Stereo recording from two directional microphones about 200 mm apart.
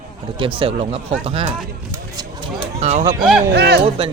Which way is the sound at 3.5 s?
55° right (ahead or behind).